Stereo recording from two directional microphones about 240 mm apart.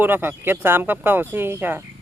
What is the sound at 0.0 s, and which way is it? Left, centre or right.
Speech, centre.